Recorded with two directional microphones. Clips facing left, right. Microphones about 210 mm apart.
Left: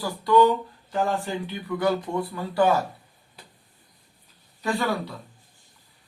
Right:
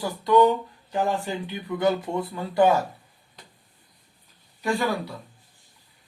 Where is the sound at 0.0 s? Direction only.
20° right (ahead or behind).